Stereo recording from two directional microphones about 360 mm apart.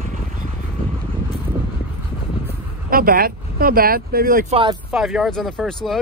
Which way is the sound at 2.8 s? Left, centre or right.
Right.